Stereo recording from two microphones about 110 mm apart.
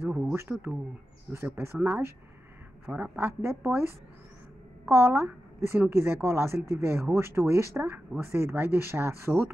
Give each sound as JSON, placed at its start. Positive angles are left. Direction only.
{"t": 0.1, "sound": "a woman's voice", "side_deg": -20}
{"t": 4.8, "sound": "a woman's voice", "side_deg": -20}